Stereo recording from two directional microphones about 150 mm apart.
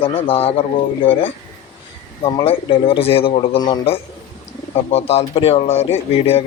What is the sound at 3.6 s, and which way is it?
Speech, 30° left (ahead or behind).